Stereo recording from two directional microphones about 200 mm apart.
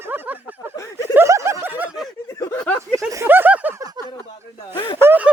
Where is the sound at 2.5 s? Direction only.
10° left (ahead or behind).